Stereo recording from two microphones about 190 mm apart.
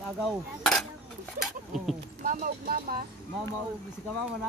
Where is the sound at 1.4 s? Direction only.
Centre (ahead or behind).